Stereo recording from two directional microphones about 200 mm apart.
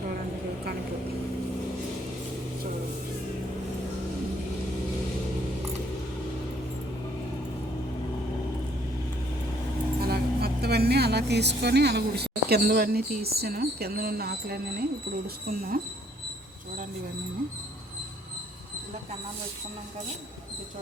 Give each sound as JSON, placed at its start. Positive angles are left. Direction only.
{"t": 10.0, "sound": "speech", "side_deg": -50}